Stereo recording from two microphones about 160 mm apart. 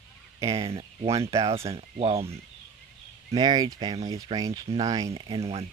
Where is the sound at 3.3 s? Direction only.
25° right (ahead or behind).